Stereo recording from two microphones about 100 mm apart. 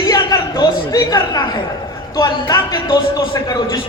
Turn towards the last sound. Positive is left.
turn(degrees=35)  # may be behind; listen again after turning